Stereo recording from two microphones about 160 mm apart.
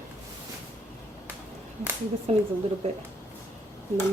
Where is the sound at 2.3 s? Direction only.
40° right (ahead or behind).